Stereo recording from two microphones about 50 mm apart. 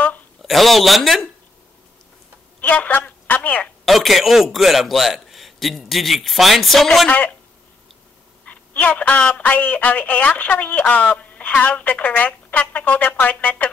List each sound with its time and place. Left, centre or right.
0.4 s speech: centre
2.6 s speech: left
3.3 s telephone: left
3.8 s a man's voice: centre
7.1 s a man's voice: left
8.5 s a sound: left
9.4 s speech: left